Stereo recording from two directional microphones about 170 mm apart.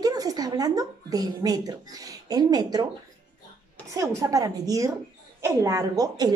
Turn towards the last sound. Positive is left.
turn(degrees=-20)  # may be behind; listen again after turning